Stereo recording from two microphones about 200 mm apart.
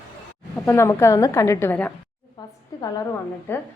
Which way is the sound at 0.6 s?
15° left (ahead or behind).